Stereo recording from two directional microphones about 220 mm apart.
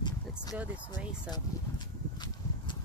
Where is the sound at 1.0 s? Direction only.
5° right (ahead or behind).